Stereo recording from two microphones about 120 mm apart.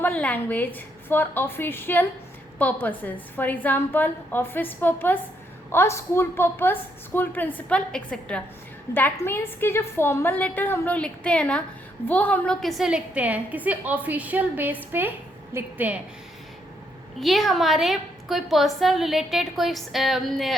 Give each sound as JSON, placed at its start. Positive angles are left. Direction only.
{"t": 0.1, "sound": "a woman's voice", "side_deg": 10}
{"t": 17.2, "sound": "a woman's voice", "side_deg": 0}